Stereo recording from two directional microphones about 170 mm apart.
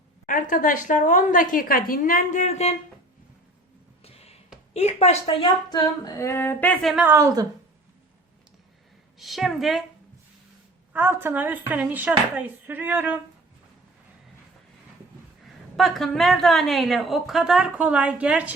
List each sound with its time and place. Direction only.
0.3 s a woman's voice: 50° left (ahead or behind)
4.0 s a sound: 35° left (ahead or behind)
4.7 s a woman's voice: 40° left (ahead or behind); by 6.9 s 10° left (ahead or behind)
6.9 s speech: 10° right (ahead or behind)
9.1 s a woman's voice: centre (ahead or behind)
10.9 s speech: 10° right (ahead or behind)
15.7 s a woman's voice: centre (ahead or behind)